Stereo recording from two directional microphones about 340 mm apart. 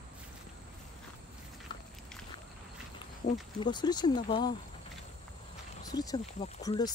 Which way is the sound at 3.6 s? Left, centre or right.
Centre.